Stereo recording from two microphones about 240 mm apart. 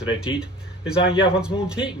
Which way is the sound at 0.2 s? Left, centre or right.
Centre.